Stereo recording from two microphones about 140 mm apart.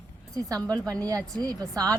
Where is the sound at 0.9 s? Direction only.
25° right (ahead or behind).